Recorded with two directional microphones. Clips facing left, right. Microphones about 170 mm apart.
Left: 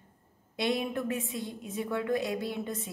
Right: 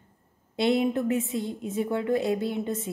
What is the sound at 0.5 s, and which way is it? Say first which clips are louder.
Speech: right 7 dB; 25° right (ahead or behind).